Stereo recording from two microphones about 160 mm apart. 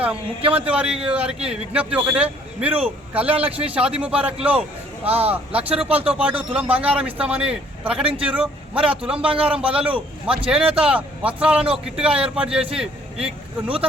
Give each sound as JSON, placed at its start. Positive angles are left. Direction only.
{"t": 0.0, "sound": "a man's voice", "side_deg": -10}
{"t": 5.9, "sound": "speech", "side_deg": -35}
{"t": 6.2, "sound": "a man's voice", "side_deg": -5}